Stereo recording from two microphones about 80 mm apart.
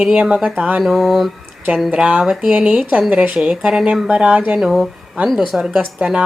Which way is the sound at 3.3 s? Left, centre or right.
Centre.